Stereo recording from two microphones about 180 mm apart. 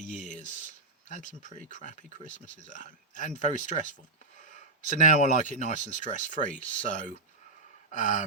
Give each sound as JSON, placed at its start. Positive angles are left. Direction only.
{"t": 0.0, "sound": "a sound", "side_deg": 45}
{"t": 0.4, "sound": "speech", "side_deg": 45}
{"t": 4.9, "sound": "speech", "side_deg": 45}
{"t": 7.9, "sound": "gasp", "side_deg": 45}